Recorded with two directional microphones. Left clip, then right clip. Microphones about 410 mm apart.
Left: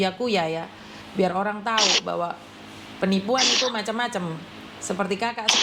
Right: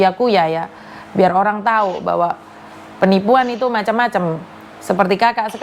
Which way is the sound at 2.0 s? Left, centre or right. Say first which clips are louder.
Right 10 dB; right.